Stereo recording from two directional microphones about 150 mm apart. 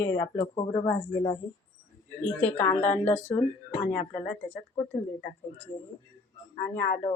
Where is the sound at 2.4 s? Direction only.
10° left (ahead or behind).